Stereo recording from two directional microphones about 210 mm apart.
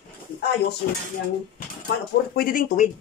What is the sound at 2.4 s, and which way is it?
Speech, 40° left (ahead or behind).